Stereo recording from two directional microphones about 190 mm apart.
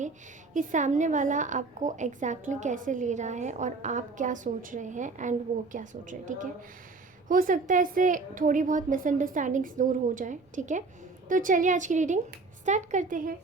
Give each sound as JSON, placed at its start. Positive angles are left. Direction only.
{"t": 0.5, "sound": "a woman's voice", "side_deg": -40}